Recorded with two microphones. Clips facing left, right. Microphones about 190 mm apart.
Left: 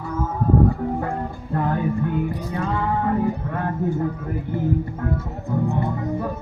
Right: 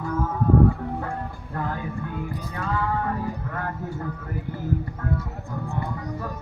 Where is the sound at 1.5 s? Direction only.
20° left (ahead or behind).